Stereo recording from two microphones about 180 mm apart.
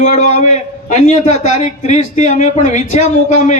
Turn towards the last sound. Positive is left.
turn(degrees=40)  # may be behind; listen again after turning